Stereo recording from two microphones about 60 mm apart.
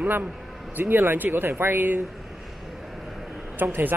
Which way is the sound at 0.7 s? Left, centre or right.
Right.